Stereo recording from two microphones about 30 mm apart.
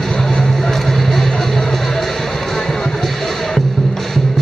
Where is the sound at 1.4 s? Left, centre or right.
Centre.